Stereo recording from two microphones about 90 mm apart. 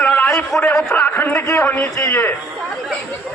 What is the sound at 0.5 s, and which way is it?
Speech, centre (ahead or behind).